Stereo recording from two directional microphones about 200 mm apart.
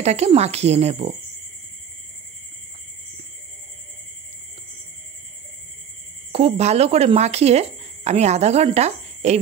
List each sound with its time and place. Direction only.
0.0 s speech: 30° right (ahead or behind)
6.3 s speech: 30° right (ahead or behind)